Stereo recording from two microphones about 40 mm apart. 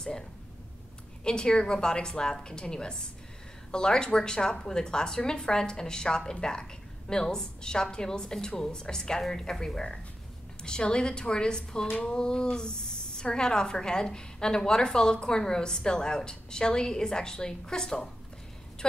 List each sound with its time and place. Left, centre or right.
1.2 s a woman's voice: left